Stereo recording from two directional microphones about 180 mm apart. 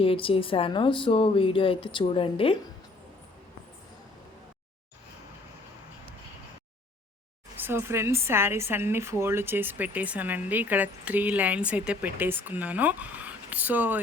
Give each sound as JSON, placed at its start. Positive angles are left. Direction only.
{"t": 0.0, "sound": "speech", "side_deg": 30}
{"t": 7.6, "sound": "a woman's voice", "side_deg": -15}